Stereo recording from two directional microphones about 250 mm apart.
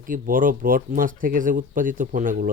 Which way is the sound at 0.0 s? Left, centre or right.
Right.